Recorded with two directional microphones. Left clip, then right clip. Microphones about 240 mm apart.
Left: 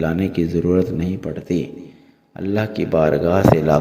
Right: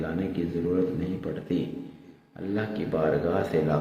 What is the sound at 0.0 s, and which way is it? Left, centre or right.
Speech, left.